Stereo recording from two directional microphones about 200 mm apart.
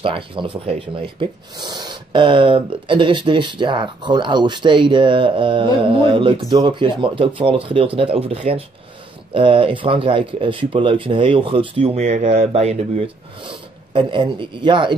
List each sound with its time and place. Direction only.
0.0 s speech: 25° right (ahead or behind)